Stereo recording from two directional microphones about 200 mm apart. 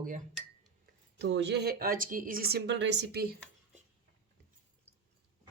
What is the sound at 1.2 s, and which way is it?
Speech, 60° right (ahead or behind).